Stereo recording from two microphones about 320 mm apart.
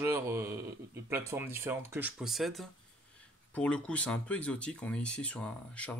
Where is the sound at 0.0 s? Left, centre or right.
Centre.